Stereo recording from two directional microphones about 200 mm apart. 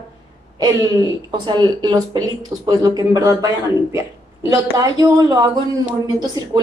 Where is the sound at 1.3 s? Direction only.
20° right (ahead or behind).